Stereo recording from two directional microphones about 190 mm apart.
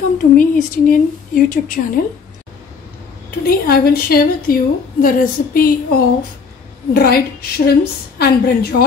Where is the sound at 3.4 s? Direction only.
50° left (ahead or behind).